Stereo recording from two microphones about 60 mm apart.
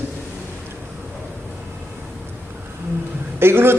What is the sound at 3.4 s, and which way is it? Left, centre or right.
Speech, right.